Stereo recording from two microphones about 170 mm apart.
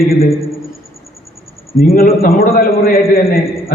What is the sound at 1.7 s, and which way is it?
A man's voice, 60° left (ahead or behind).